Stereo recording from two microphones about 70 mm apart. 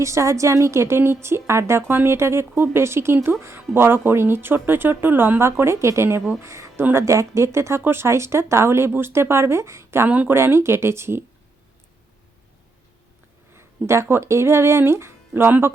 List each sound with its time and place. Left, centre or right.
0.0 s speech: right
10.1 s speech: right
10.3 s speech: right
13.6 s speech: right